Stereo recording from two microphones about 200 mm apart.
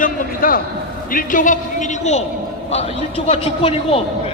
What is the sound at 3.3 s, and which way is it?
Speech, 30° left (ahead or behind).